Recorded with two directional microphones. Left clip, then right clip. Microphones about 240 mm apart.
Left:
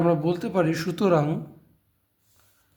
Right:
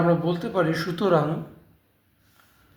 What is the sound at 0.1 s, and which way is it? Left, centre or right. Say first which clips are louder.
Speech: even; left.